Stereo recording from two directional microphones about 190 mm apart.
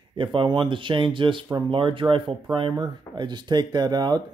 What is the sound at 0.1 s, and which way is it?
Speech, 25° right (ahead or behind).